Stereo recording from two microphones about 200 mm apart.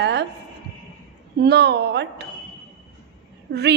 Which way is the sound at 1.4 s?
55° right (ahead or behind).